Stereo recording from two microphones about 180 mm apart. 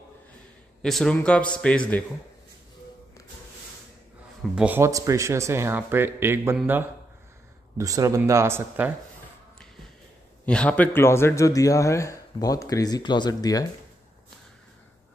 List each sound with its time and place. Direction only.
0.8 s a man's voice: 5° left (ahead or behind)
4.6 s speech: 10° right (ahead or behind)
10.4 s a man's voice: 5° left (ahead or behind)